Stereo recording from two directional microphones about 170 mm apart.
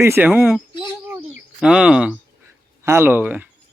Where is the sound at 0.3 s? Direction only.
5° right (ahead or behind).